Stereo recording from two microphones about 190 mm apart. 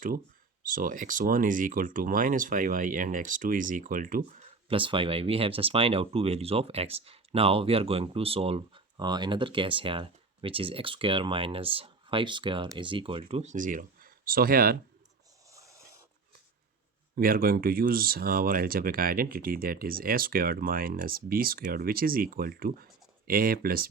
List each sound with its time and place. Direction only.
0.6 s speech: 45° right (ahead or behind)
4.7 s speech: 25° right (ahead or behind); by 14.8 s 50° right (ahead or behind)
15.4 s a sound: 15° right (ahead or behind)
17.2 s speech: 50° right (ahead or behind)